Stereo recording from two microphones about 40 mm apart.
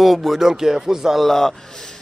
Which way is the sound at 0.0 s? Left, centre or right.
Centre.